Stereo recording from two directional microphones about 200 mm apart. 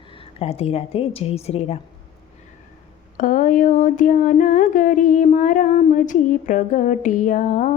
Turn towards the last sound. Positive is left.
turn(degrees=40)  # may be behind; listen again after turning